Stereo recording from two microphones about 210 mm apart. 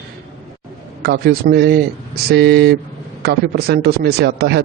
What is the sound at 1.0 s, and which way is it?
A man's voice, 45° right (ahead or behind).